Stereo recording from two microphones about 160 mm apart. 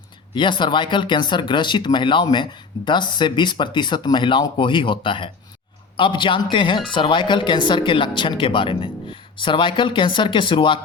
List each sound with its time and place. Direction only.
0.3 s speech: 30° left (ahead or behind)